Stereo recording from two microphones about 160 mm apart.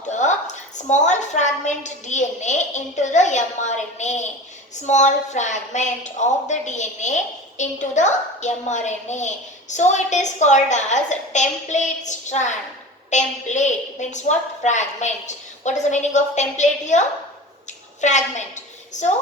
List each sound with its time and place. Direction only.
0.1 s a woman's voice: 50° left (ahead or behind)